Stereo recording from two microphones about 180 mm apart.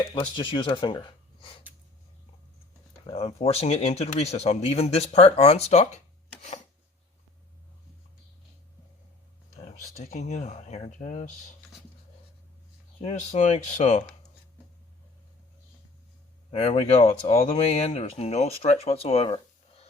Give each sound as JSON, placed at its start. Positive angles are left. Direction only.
{"t": 0.1, "sound": "speech", "side_deg": 25}
{"t": 3.1, "sound": "speech", "side_deg": 30}
{"t": 9.6, "sound": "speech", "side_deg": 40}
{"t": 13.0, "sound": "speech", "side_deg": 35}
{"t": 16.5, "sound": "speech", "side_deg": 35}